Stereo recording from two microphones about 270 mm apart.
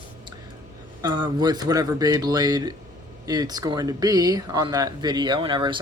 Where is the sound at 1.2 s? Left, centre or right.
Centre.